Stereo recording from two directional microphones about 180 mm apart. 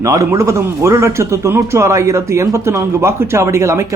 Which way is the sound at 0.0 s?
15° right (ahead or behind).